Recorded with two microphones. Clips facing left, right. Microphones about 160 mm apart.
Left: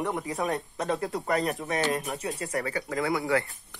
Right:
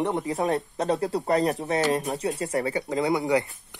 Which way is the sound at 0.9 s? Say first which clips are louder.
Right 4 dB; 30° right (ahead or behind).